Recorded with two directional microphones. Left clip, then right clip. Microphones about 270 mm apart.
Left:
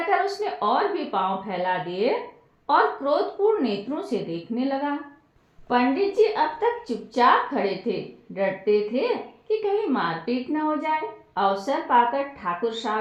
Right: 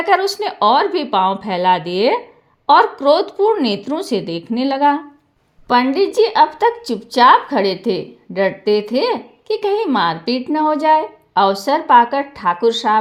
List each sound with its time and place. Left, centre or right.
0.1 s a woman's voice: right